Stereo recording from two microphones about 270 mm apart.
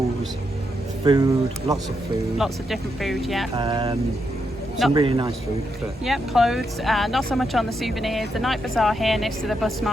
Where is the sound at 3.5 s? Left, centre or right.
Centre.